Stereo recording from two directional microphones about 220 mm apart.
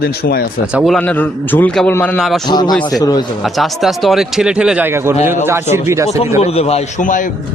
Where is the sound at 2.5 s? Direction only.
20° left (ahead or behind).